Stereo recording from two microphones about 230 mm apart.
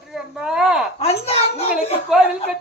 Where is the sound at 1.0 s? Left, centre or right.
Left.